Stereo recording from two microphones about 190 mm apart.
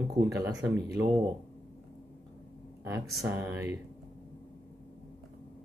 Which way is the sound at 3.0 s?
Centre (ahead or behind).